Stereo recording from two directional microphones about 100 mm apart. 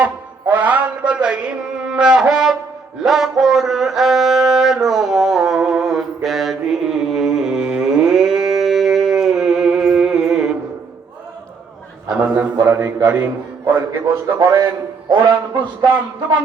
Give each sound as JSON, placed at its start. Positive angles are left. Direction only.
{"t": 0.5, "sound": "mantra", "side_deg": -15}
{"t": 3.0, "sound": "music", "side_deg": -5}
{"t": 12.1, "sound": "a sound", "side_deg": -15}
{"t": 12.6, "sound": "speech", "side_deg": -20}
{"t": 13.1, "sound": "music", "side_deg": -15}
{"t": 14.3, "sound": "a man's voice", "side_deg": -35}
{"t": 15.1, "sound": "a man's voice", "side_deg": -50}